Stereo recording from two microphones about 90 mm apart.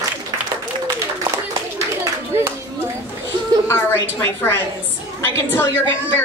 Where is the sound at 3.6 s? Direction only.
25° left (ahead or behind).